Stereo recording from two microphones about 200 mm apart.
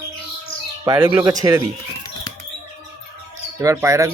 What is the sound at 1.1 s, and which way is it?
Speech, 15° right (ahead or behind).